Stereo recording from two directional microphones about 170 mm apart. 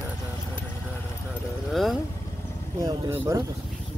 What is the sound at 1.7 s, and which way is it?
Vehicle, centre (ahead or behind).